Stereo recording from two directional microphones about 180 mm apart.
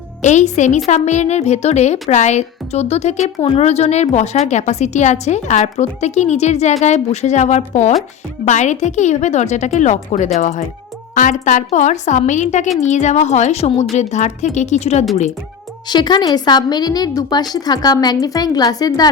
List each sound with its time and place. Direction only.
0.2 s a woman's voice: 40° left (ahead or behind)
15.9 s a woman's voice: 25° left (ahead or behind)